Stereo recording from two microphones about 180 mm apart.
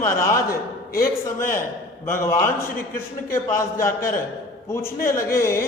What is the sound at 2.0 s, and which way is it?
Speech, 10° left (ahead or behind).